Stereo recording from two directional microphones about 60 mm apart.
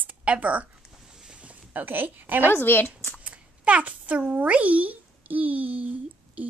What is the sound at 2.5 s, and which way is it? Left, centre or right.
Speech, left.